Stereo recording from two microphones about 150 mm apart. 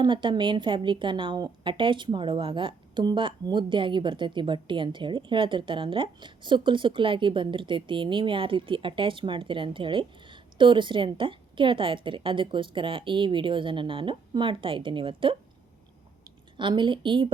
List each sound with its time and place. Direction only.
0.0 s a woman's voice: 30° right (ahead or behind)